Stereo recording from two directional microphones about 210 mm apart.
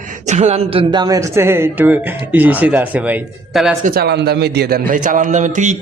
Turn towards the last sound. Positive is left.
turn(degrees=-35)  # may be behind; listen again after turning